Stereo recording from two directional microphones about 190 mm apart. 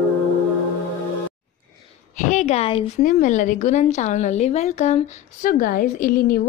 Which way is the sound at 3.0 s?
45° left (ahead or behind).